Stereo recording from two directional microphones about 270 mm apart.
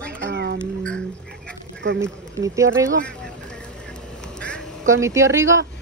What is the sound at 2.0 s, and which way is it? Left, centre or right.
Speech, centre.